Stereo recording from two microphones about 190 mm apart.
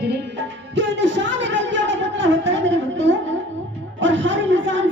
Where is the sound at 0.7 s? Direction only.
70° right (ahead or behind).